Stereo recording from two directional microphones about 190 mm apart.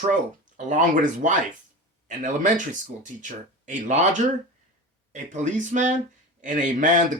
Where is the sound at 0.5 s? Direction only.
40° right (ahead or behind).